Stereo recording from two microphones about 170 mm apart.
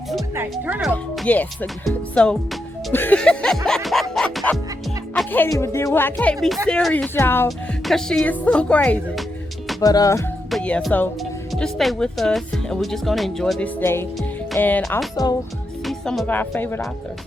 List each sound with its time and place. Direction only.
0.5 s speech: 5° right (ahead or behind)
4.1 s music: centre (ahead or behind)
5.1 s speech: 10° left (ahead or behind)
7.9 s speech: 5° left (ahead or behind)
9.8 s speech: 20° left (ahead or behind)
10.5 s speech: 5° left (ahead or behind); by 15.4 s 20° left (ahead or behind)
15.9 s speech: centre (ahead or behind)